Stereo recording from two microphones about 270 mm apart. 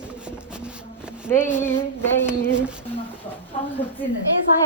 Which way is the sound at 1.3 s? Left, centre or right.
Centre.